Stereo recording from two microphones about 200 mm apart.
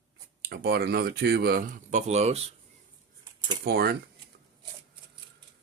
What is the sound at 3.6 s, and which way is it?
Speech, 50° right (ahead or behind).